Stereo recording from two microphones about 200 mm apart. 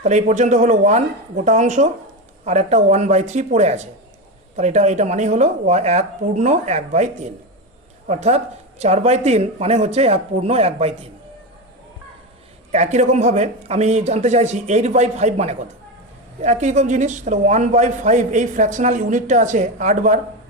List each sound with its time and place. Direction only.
0.0 s speech: 35° right (ahead or behind)
12.7 s speech: 35° right (ahead or behind)